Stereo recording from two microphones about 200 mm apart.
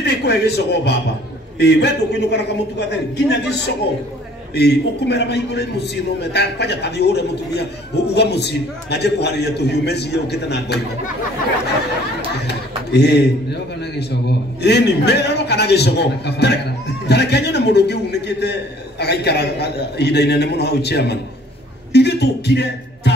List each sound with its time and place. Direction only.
0.0 s a man's voice: 55° left (ahead or behind)
12.4 s a sound: 55° left (ahead or behind)
13.9 s a man's voice: 55° left (ahead or behind)